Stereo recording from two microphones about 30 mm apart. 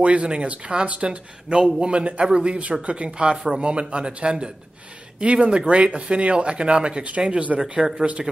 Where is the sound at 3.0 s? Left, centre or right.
Right.